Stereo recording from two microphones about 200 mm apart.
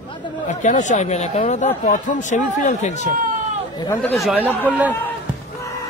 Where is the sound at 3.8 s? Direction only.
10° left (ahead or behind).